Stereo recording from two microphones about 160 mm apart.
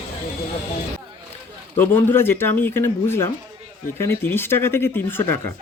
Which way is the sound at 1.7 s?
15° left (ahead or behind).